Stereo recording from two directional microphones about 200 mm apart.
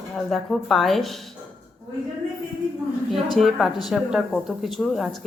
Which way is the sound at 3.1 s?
Centre (ahead or behind).